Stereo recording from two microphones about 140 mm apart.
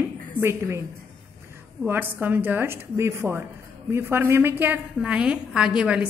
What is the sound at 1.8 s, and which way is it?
A woman's voice, 15° right (ahead or behind).